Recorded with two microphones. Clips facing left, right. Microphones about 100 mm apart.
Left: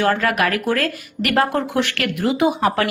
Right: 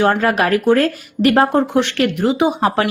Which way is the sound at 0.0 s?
30° right (ahead or behind).